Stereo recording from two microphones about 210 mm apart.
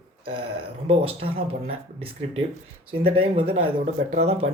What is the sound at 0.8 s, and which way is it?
Speech, 25° right (ahead or behind).